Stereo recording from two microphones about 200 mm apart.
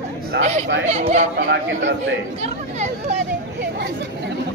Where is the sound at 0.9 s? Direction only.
35° right (ahead or behind).